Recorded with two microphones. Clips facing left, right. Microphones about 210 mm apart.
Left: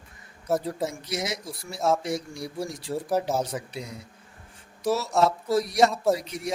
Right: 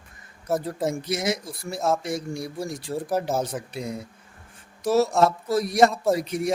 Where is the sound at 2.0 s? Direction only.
50° right (ahead or behind).